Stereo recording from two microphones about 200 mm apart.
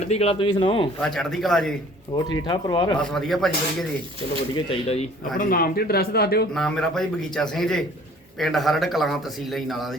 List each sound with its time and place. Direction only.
0.0 s speech: 30° left (ahead or behind)
1.0 s a man's voice: centre (ahead or behind)
2.1 s speech: 25° left (ahead or behind)
3.0 s a man's voice: centre (ahead or behind)
4.7 s speech: 30° left (ahead or behind)
5.4 s speech: 45° left (ahead or behind)
6.5 s a man's voice: 5° left (ahead or behind)